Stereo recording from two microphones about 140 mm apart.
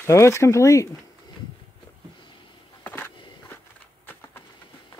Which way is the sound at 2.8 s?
15° left (ahead or behind).